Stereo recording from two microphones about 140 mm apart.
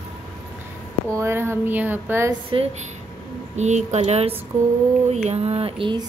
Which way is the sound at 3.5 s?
55° right (ahead or behind).